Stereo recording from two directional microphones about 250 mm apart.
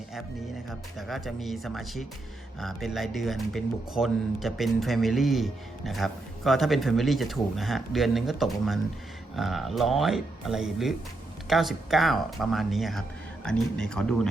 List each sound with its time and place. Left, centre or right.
0.7 s speech: centre